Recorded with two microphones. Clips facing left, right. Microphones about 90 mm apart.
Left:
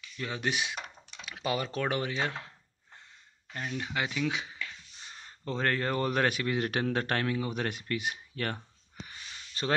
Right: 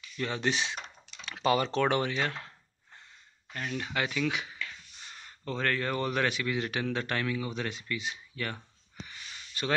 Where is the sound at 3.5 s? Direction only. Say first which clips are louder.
Right 1 dB; 15° left (ahead or behind).